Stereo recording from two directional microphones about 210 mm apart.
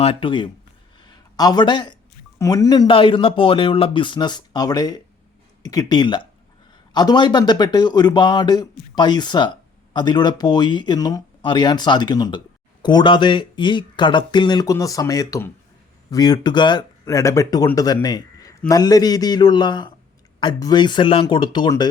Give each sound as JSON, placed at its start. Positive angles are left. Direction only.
{"t": 0.0, "sound": "speech", "side_deg": 25}
{"t": 1.0, "sound": "a sound", "side_deg": 20}
{"t": 2.4, "sound": "speech", "side_deg": 15}